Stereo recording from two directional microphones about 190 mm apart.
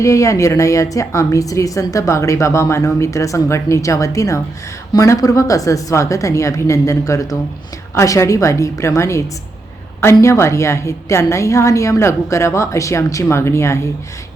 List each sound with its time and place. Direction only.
0.0 s a woman's voice: 15° left (ahead or behind)